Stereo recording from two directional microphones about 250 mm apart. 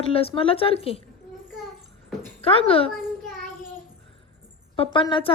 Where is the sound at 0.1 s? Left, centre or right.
Left.